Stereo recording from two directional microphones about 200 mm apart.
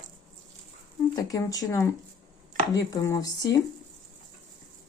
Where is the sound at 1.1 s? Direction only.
15° left (ahead or behind).